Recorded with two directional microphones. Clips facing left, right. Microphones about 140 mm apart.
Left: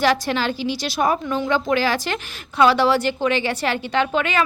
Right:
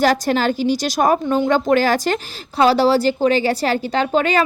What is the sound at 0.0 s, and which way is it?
A woman's voice, 40° right (ahead or behind).